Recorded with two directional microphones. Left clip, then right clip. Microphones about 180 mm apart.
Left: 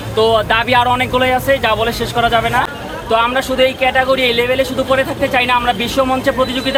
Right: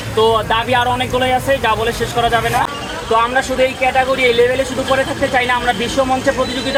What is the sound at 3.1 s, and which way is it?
Speech, 20° left (ahead or behind).